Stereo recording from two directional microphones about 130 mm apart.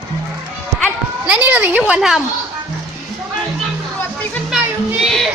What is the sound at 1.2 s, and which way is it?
Speech, 10° right (ahead or behind).